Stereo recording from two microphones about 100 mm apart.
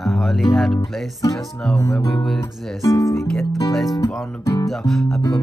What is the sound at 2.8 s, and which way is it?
Speech, 35° left (ahead or behind).